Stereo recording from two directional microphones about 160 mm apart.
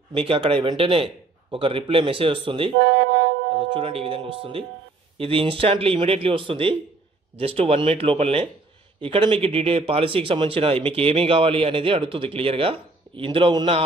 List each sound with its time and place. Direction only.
0.1 s speech: 35° right (ahead or behind)
2.8 s music: 90° right
3.7 s speech: 35° right (ahead or behind)